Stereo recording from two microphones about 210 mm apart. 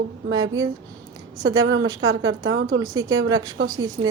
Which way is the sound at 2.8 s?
15° right (ahead or behind).